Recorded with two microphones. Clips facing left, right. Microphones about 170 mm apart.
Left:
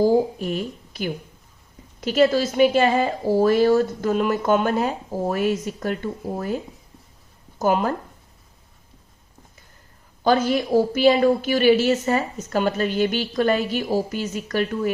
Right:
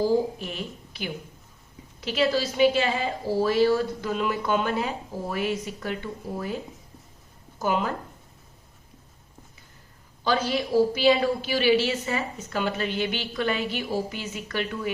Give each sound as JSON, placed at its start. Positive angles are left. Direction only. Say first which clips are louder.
{"t": 0.0, "sound": "a woman's voice", "louder": "left 5 dB", "side_deg": 45}
{"t": 7.6, "sound": "a woman's voice", "louder": "left 5 dB", "side_deg": 45}
{"t": 10.2, "sound": "a woman's voice", "louder": "left 6 dB", "side_deg": 50}